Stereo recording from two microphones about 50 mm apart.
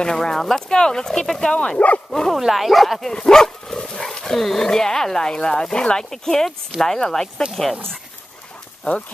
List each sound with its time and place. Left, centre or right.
0.0 s speech: centre
1.5 s speech: left
2.0 s speech: centre
2.3 s speech: centre